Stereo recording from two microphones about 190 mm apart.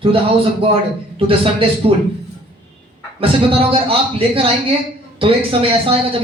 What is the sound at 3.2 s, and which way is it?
Speech, 30° right (ahead or behind).